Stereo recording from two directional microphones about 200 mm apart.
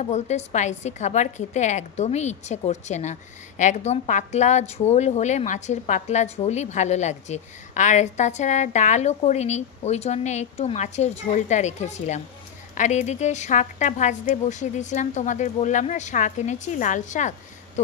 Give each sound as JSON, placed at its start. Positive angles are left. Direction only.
{"t": 0.0, "sound": "a woman's voice", "side_deg": 35}